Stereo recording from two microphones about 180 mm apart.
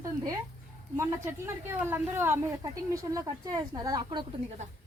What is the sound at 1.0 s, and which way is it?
A woman's voice, 15° right (ahead or behind).